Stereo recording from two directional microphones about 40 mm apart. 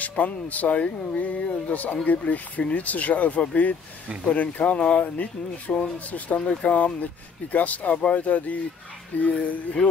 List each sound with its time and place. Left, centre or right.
0.0 s speech: left